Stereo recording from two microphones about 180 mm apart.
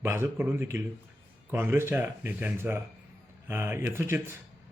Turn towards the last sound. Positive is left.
turn(degrees=-15)  # may be behind; listen again after turning